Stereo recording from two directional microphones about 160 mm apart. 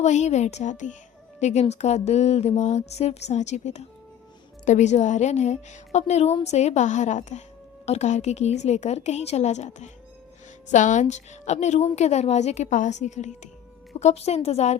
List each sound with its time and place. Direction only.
0.0 s a woman's voice: 45° left (ahead or behind)